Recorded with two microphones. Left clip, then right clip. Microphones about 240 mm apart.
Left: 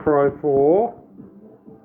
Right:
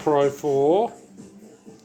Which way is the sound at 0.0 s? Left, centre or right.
Right.